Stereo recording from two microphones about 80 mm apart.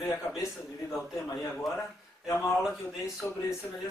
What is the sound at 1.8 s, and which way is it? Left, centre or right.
Speech, left.